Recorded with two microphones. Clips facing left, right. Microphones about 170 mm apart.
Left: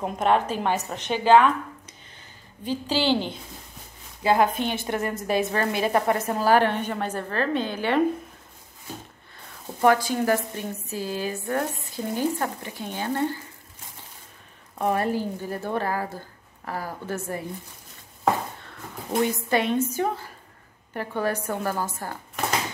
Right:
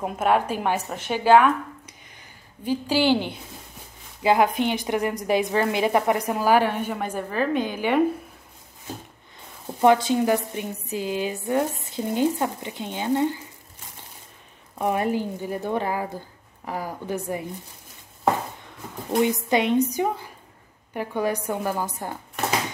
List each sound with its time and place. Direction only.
0.0 s a woman's voice: 10° right (ahead or behind)
2.6 s a woman's voice: 10° right (ahead or behind)
9.8 s a woman's voice: 20° right (ahead or behind)
14.8 s a woman's voice: 15° right (ahead or behind)
19.1 s a woman's voice: 15° right (ahead or behind)